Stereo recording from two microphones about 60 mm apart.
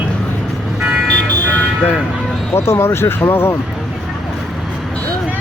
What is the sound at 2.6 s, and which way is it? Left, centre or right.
Speech, left.